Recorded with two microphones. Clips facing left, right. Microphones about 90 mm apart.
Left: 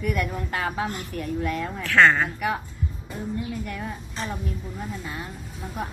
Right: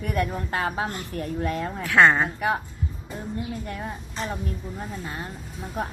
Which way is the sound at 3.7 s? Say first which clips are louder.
Even; 30° right (ahead or behind).